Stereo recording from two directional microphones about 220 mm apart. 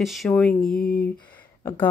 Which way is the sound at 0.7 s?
45° left (ahead or behind).